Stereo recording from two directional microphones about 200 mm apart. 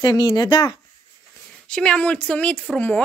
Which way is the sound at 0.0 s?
20° left (ahead or behind).